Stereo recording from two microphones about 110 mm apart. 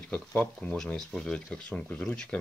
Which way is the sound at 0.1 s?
10° left (ahead or behind).